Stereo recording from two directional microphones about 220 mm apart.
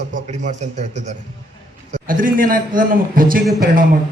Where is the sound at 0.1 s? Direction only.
35° right (ahead or behind).